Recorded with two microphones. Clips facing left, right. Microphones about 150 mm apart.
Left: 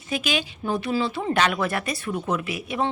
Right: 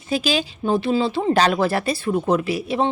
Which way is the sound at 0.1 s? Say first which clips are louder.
Right 5 dB; 35° right (ahead or behind).